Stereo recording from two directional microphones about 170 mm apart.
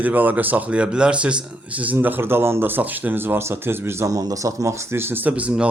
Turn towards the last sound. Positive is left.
turn(degrees=-5)  # may be behind; listen again after turning